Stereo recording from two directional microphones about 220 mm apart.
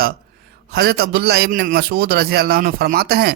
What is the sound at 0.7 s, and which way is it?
Speech, 45° right (ahead or behind).